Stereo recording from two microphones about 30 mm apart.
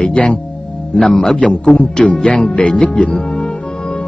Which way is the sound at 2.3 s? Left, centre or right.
Left.